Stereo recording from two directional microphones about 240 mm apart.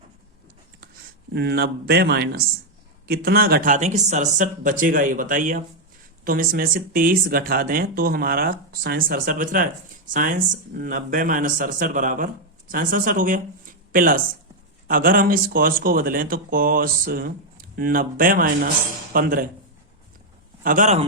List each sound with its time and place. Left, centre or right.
1.3 s speech: right
20.7 s speech: right